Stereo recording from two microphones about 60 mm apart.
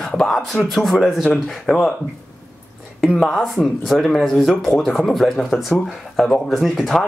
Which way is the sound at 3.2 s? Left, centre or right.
Centre.